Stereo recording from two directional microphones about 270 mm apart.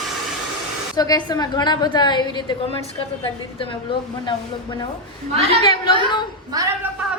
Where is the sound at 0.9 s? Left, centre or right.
Centre.